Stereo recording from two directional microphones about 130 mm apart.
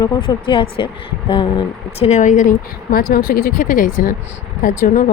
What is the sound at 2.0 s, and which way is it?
Speech, 70° left (ahead or behind).